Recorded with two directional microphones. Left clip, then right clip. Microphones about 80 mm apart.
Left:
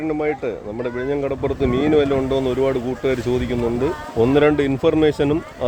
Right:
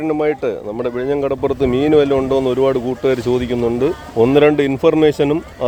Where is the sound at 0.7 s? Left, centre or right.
Right.